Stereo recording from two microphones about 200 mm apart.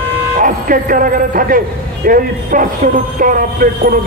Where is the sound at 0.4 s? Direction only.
40° right (ahead or behind).